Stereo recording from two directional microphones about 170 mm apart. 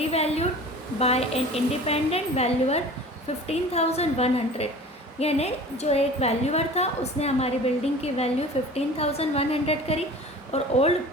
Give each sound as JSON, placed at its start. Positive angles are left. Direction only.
{"t": 0.0, "sound": "a woman's voice", "side_deg": 40}